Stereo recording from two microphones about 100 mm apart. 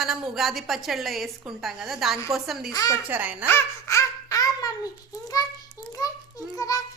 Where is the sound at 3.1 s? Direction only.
15° right (ahead or behind).